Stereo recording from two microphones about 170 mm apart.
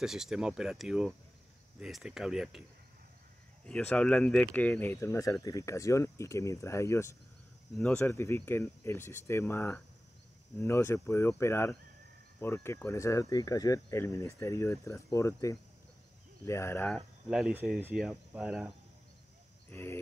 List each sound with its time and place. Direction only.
0.0 s speech: 5° right (ahead or behind)
3.6 s speech: 5° left (ahead or behind)
17.3 s speech: 5° right (ahead or behind)
19.7 s speech: 15° left (ahead or behind)